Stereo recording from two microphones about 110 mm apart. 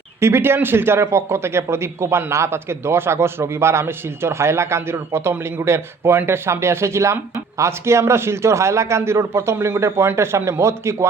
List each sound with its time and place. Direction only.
0.2 s a man's voice: 25° right (ahead or behind)